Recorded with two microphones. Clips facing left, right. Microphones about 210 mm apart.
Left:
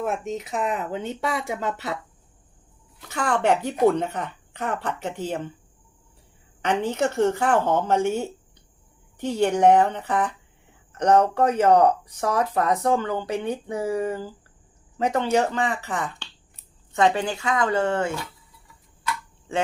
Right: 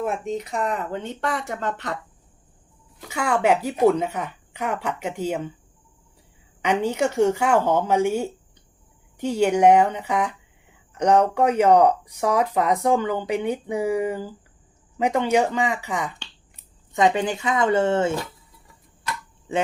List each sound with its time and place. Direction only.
0.0 s speech: centre (ahead or behind)
3.1 s speech: 10° right (ahead or behind)
6.6 s a woman's voice: 10° right (ahead or behind)